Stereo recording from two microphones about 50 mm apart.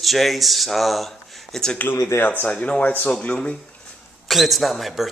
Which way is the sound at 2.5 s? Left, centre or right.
Left.